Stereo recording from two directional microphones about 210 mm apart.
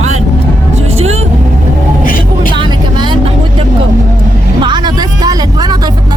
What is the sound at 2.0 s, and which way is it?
Vehicle, 40° left (ahead or behind).